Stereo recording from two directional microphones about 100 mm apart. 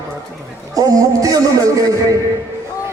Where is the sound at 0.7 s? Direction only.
35° right (ahead or behind).